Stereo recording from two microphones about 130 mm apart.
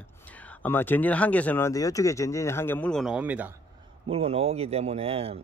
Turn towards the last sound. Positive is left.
turn(degrees=-50)  # may be behind; listen again after turning